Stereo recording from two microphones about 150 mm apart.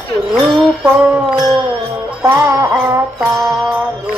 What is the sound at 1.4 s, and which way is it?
Music, 25° right (ahead or behind).